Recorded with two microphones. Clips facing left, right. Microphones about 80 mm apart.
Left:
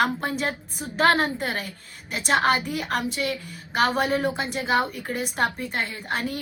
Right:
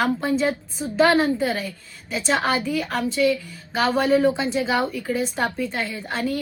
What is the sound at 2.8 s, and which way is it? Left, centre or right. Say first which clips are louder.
Speech: right 5 dB; centre.